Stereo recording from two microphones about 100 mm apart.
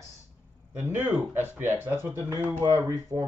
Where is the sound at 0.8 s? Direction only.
20° right (ahead or behind); by 3.3 s 35° right (ahead or behind).